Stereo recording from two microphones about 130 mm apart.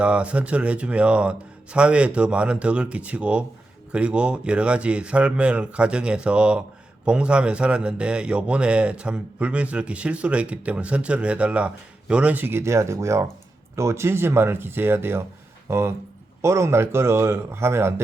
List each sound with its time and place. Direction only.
0.0 s a man's voice: 10° right (ahead or behind)